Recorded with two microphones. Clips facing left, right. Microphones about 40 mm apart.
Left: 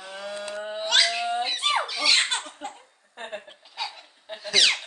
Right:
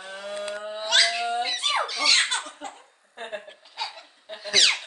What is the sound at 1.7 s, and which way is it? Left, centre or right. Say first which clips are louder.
Speech: right 1 dB; centre.